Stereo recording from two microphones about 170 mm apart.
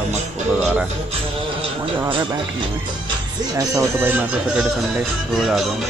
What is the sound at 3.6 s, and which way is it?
Speech, 15° right (ahead or behind).